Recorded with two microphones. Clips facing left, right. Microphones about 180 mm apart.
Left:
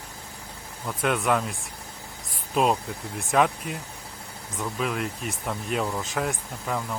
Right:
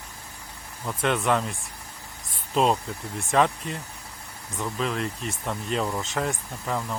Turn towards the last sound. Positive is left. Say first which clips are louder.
# even
turn(degrees=0)  # may be behind; listen again after turning